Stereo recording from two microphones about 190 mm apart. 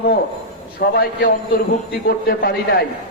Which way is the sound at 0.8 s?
50° left (ahead or behind).